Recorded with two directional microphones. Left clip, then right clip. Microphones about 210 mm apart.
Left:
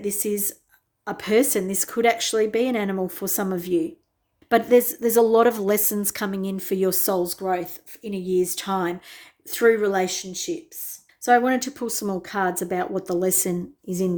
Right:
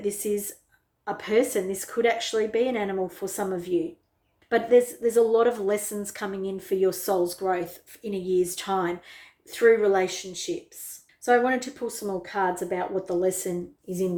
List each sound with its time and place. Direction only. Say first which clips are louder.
0.0 s speech: left 1 dB; 35° left (ahead or behind)